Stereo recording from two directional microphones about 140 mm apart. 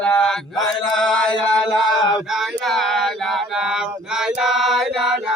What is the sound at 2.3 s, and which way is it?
Male singing, centre (ahead or behind).